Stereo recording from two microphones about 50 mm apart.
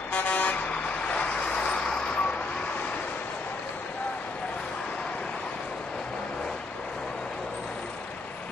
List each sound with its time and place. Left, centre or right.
0.1 s vehicle: left